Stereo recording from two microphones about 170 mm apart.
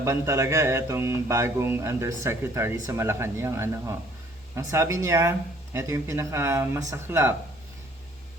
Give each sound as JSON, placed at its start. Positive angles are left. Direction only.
{"t": 0.0, "sound": "speech", "side_deg": -15}